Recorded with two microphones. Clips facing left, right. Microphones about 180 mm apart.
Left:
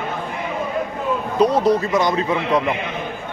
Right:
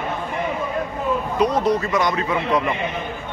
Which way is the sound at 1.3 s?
30° left (ahead or behind).